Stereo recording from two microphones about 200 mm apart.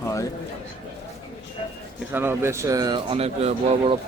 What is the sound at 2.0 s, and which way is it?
Speech, 10° right (ahead or behind).